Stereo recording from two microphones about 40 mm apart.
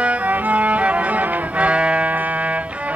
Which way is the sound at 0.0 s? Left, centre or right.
Right.